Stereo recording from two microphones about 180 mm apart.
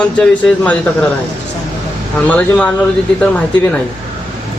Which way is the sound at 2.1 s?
10° left (ahead or behind).